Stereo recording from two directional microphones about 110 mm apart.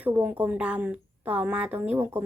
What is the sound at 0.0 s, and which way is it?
Speech, 15° right (ahead or behind).